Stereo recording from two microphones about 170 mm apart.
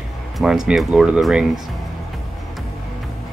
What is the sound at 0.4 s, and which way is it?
Speech, centre (ahead or behind).